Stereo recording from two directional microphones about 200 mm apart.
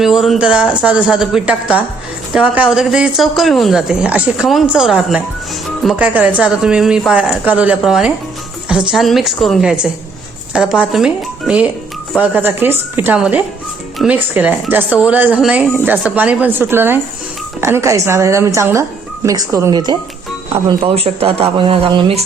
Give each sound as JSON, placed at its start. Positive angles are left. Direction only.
{"t": 0.0, "sound": "a woman's voice", "side_deg": 0}